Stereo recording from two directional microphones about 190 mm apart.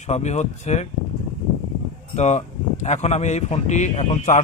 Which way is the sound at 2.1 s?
35° left (ahead or behind).